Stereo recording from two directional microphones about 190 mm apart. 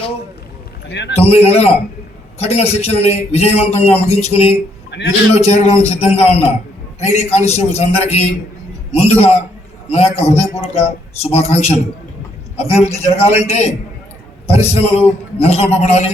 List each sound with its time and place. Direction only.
0.9 s a man's voice: 65° left (ahead or behind)
1.1 s a man's voice: 35° left (ahead or behind)
4.9 s a man's voice: 65° left (ahead or behind)
5.3 s a man's voice: 35° left (ahead or behind)